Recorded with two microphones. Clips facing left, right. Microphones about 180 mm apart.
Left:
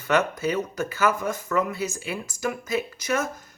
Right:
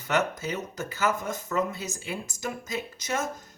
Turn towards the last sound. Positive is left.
turn(degrees=-20)  # may be behind; listen again after turning